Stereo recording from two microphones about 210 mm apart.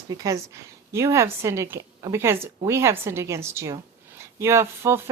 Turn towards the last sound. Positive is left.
turn(degrees=-10)  # may be behind; listen again after turning